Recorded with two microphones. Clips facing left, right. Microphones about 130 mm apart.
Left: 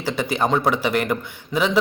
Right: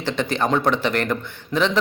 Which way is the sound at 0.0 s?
10° left (ahead or behind).